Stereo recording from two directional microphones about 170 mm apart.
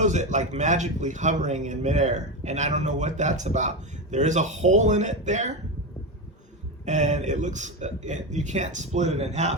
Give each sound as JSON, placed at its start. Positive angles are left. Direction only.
{"t": 0.0, "sound": "a man's voice", "side_deg": -45}
{"t": 6.8, "sound": "a man's voice", "side_deg": -45}